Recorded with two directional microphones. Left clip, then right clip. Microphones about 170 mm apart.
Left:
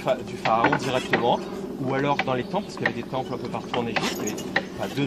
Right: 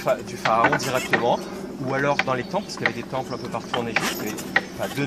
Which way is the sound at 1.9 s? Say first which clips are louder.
Right 2 dB; 5° right (ahead or behind).